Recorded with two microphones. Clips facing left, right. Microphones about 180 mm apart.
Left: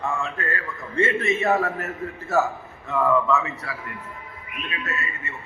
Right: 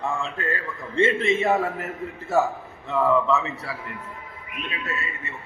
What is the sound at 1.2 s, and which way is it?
Speech, 25° right (ahead or behind).